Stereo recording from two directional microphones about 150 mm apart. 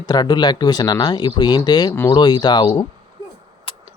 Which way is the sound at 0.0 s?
25° left (ahead or behind).